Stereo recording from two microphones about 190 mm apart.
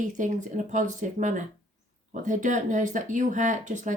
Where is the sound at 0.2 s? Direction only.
40° right (ahead or behind).